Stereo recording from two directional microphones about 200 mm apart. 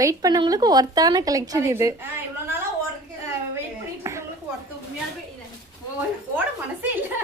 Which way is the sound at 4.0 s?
15° right (ahead or behind).